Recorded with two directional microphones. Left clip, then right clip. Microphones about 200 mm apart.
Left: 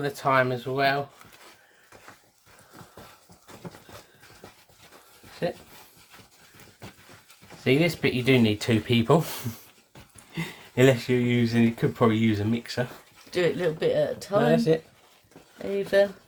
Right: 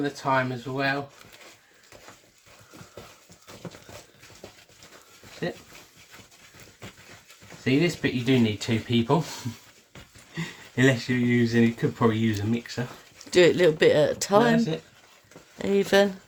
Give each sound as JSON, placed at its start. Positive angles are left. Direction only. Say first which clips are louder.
{"t": 0.0, "sound": "speech", "louder": "left 2 dB", "side_deg": 40}
{"t": 7.6, "sound": "speech", "louder": "left 2 dB", "side_deg": 45}
{"t": 13.3, "sound": "speech", "louder": "right 6 dB", "side_deg": -60}
{"t": 14.5, "sound": "speech", "louder": "left 4 dB", "side_deg": 40}
{"t": 15.6, "sound": "speech", "louder": "right 1 dB", "side_deg": -60}